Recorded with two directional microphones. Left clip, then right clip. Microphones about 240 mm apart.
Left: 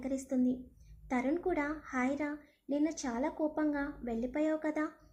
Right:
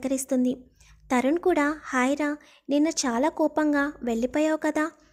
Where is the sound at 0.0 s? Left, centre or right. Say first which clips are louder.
Right 9 dB; right.